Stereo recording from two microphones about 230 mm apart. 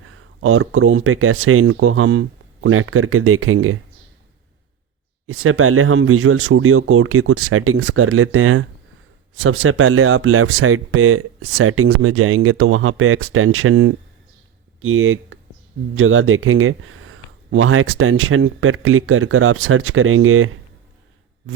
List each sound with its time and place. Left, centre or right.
0.0 s speech: right
5.2 s speech: right